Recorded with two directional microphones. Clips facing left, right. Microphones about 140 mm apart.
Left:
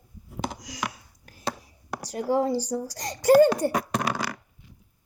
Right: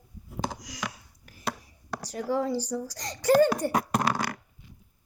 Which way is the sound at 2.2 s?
35° left (ahead or behind).